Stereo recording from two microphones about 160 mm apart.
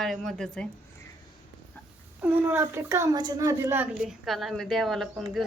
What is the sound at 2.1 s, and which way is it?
Speech, 10° right (ahead or behind).